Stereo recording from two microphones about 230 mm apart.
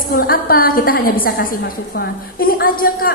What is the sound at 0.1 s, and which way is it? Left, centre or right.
A woman's voice, left.